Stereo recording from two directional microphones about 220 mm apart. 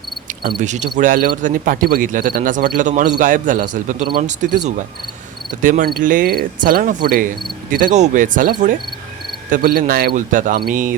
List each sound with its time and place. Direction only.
0.4 s speech: 35° right (ahead or behind)